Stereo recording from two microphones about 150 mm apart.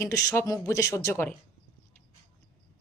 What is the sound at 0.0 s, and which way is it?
Speech, 20° left (ahead or behind).